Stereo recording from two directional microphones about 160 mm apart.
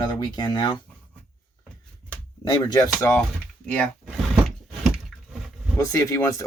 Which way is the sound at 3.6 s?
5° left (ahead or behind).